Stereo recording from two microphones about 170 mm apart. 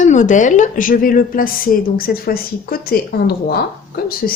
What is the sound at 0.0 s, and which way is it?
A woman's voice, 45° left (ahead or behind).